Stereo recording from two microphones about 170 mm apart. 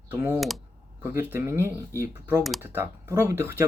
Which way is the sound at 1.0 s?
15° right (ahead or behind).